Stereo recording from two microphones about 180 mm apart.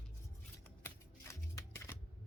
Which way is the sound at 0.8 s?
15° left (ahead or behind).